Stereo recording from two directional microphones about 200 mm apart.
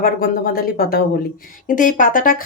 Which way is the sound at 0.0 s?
45° left (ahead or behind).